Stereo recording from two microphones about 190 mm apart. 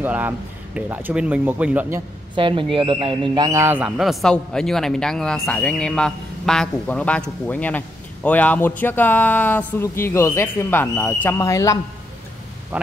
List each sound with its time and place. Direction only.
0.0 s speech: 10° right (ahead or behind)
2.3 s speech: 25° right (ahead or behind); by 11.8 s 15° left (ahead or behind)